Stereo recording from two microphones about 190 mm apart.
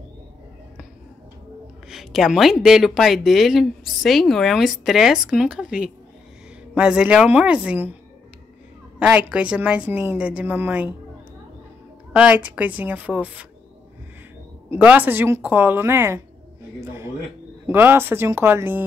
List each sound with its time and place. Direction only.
1.9 s speech: centre (ahead or behind)
9.0 s a woman's voice: 5° right (ahead or behind)
12.1 s a woman's voice: 5° right (ahead or behind)
14.7 s a woman's voice: 5° right (ahead or behind)
17.6 s a woman's voice: 10° right (ahead or behind)